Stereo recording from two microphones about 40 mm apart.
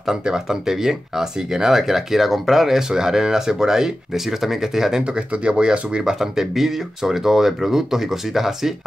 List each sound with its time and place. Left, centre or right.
0.0 s speech: centre
5.3 s speech: right
6.1 s speech: centre